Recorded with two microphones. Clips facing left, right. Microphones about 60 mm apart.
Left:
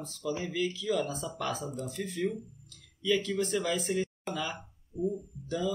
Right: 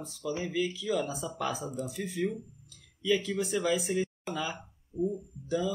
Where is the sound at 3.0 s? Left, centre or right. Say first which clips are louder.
Even; centre.